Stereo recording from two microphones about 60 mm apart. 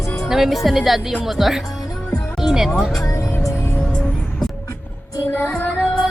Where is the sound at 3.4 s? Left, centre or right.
Left.